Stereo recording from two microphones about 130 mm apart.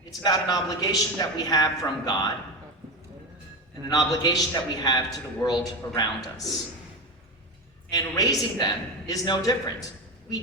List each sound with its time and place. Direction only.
0.2 s a man's voice: 30° left (ahead or behind)
3.8 s a man's voice: 30° left (ahead or behind)
7.9 s a man's voice: 30° left (ahead or behind)